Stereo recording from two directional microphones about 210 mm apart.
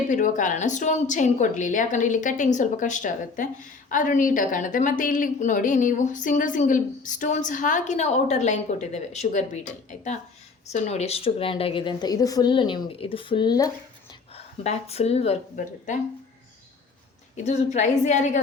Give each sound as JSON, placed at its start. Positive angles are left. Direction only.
{"t": 0.1, "sound": "a woman's voice", "side_deg": 35}
{"t": 10.7, "sound": "a woman's voice", "side_deg": 30}
{"t": 17.3, "sound": "a woman's voice", "side_deg": 35}